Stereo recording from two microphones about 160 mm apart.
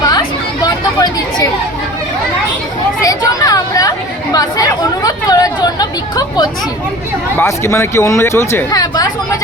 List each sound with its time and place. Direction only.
0.0 s chatter: 25° left (ahead or behind)
3.0 s chatter: 20° left (ahead or behind)
7.3 s speech: 15° left (ahead or behind)